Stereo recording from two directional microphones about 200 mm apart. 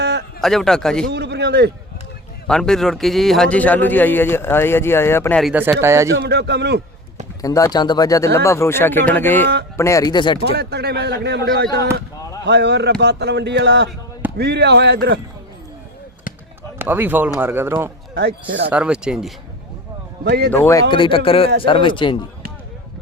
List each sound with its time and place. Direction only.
0.0 s a sound: 55° right (ahead or behind)
0.4 s speech: centre (ahead or behind)
1.1 s a man's voice: 55° right (ahead or behind)
2.5 s a man's voice: 5° left (ahead or behind)
5.4 s speech: 5° right (ahead or behind)
6.1 s a man's voice: 60° right (ahead or behind)
7.4 s a man's voice: 15° left (ahead or behind)
10.6 s a man's voice: 55° right (ahead or behind)
16.7 s speech: 10° right (ahead or behind)
18.1 s speech: 55° right (ahead or behind)
18.7 s speech: 5° right (ahead or behind)
20.2 s a man's voice: 55° right (ahead or behind)
20.5 s a man's voice: 15° left (ahead or behind)
20.9 s speech: 25° left (ahead or behind)